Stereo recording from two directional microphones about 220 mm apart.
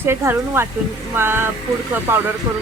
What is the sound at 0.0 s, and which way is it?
Speech, 10° right (ahead or behind).